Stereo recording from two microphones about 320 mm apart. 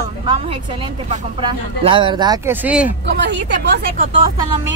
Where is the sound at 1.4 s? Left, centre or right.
Centre.